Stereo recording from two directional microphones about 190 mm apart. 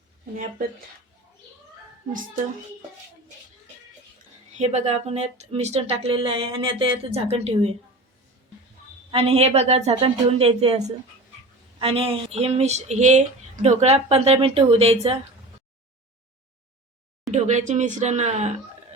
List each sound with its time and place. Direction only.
4.5 s speech: 35° right (ahead or behind)
9.1 s speech: 30° right (ahead or behind)
17.3 s speech: 40° right (ahead or behind)